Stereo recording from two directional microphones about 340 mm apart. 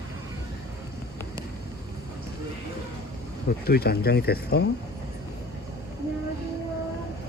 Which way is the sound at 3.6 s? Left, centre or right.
Left.